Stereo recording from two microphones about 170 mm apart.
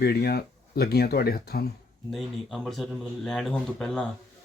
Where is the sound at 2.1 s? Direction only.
Centre (ahead or behind).